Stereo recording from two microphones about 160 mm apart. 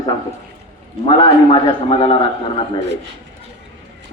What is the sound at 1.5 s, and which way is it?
A man's voice, 30° left (ahead or behind).